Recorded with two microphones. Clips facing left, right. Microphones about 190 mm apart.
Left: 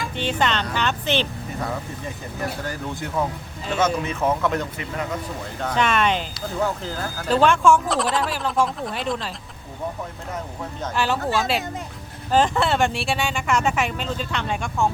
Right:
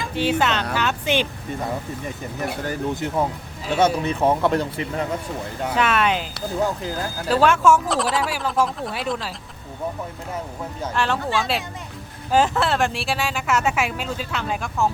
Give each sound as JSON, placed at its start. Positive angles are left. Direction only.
{"t": 0.0, "sound": "speech", "side_deg": -5}
{"t": 2.6, "sound": "speech", "side_deg": -20}
{"t": 3.8, "sound": "speech", "side_deg": -35}
{"t": 5.6, "sound": "speech", "side_deg": -5}
{"t": 7.3, "sound": "speech", "side_deg": -5}
{"t": 10.9, "sound": "speech", "side_deg": 5}